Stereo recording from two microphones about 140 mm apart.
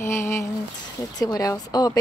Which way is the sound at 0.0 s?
20° left (ahead or behind).